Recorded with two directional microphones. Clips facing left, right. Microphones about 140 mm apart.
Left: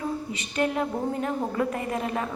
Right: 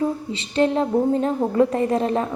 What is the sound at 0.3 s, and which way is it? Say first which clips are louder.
A woman's voice: right 6 dB; 30° right (ahead or behind).